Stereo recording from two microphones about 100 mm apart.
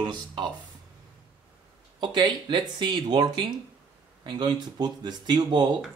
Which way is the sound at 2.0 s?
50° right (ahead or behind).